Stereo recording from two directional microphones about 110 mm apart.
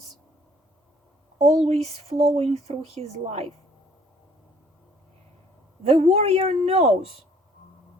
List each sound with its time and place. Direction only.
1.4 s speech: 85° right
5.8 s speech: 75° right (ahead or behind)